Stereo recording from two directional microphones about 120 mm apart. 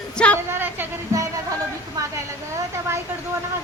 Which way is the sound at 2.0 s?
30° right (ahead or behind).